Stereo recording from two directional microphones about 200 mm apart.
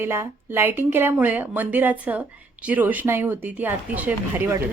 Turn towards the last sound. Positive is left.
turn(degrees=-10)  # may be behind; listen again after turning